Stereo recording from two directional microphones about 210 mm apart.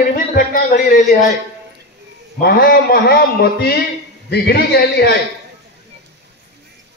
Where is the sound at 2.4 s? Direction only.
45° left (ahead or behind).